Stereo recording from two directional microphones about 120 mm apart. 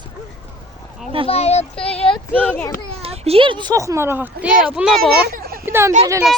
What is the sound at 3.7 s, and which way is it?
Speech, 25° right (ahead or behind).